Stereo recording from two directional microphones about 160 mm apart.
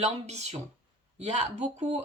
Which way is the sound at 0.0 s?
45° right (ahead or behind).